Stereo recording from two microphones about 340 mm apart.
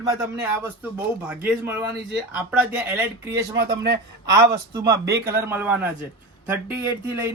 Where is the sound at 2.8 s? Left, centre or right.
Centre.